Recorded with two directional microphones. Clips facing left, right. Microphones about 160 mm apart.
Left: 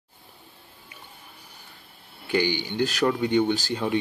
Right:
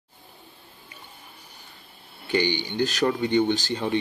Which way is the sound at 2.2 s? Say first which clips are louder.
Even; 5° left (ahead or behind).